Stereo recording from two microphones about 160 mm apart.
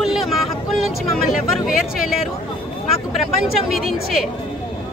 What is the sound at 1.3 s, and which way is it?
Speech, 60° left (ahead or behind).